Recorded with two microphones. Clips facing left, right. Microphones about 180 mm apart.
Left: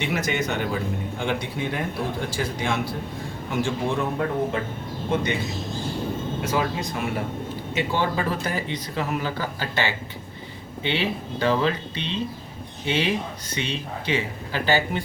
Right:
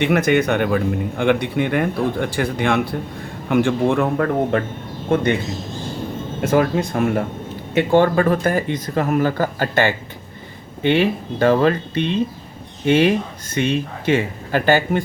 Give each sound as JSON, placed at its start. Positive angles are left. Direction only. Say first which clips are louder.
{"t": 0.0, "sound": "speech", "louder": "right 9 dB", "side_deg": -60}
{"t": 5.1, "sound": "speech", "louder": "right 6 dB", "side_deg": -55}
{"t": 6.4, "sound": "speech", "louder": "right 10 dB", "side_deg": -55}